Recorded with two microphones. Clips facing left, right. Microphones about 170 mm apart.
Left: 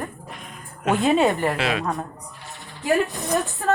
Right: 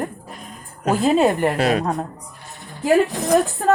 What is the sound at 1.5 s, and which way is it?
Speech, 40° right (ahead or behind).